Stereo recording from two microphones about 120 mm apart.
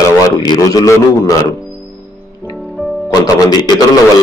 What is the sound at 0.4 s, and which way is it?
Speech, 30° left (ahead or behind).